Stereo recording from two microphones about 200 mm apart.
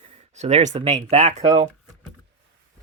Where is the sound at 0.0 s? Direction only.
30° right (ahead or behind).